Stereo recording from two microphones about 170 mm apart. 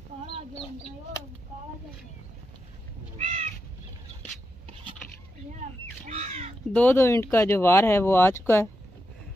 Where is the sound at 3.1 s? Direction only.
40° right (ahead or behind).